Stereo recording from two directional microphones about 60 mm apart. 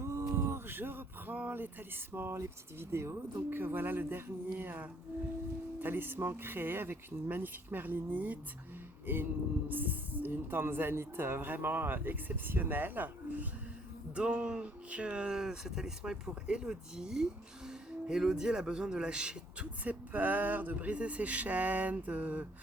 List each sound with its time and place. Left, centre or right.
0.0 s a sound: right
2.1 s speech: right
14.2 s speech: centre